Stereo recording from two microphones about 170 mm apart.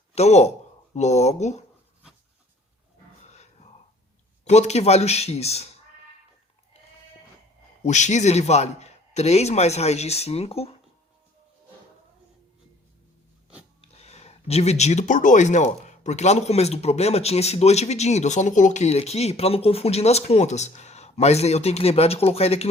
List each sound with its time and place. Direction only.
0.1 s speech: 40° left (ahead or behind)
3.2 s a sound: 40° left (ahead or behind)
4.4 s speech: 40° left (ahead or behind)
7.9 s speech: 45° left (ahead or behind)
13.8 s speech: 40° left (ahead or behind)